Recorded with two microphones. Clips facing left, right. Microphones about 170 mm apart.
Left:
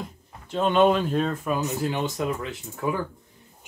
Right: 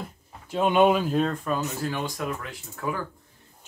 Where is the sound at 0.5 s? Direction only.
10° right (ahead or behind).